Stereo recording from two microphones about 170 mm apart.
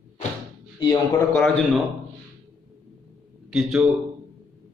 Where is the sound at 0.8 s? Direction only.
25° left (ahead or behind).